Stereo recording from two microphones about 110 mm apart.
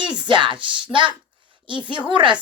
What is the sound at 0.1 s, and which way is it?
Speech, 45° right (ahead or behind).